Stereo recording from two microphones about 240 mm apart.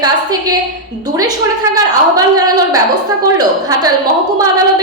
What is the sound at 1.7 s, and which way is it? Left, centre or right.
A woman's voice, centre.